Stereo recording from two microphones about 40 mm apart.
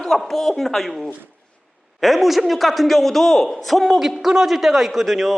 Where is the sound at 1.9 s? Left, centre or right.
Centre.